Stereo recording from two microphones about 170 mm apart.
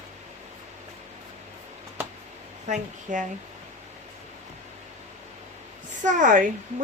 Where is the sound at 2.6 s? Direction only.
45° right (ahead or behind).